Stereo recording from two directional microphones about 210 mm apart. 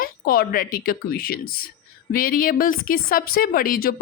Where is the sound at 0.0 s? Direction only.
45° left (ahead or behind).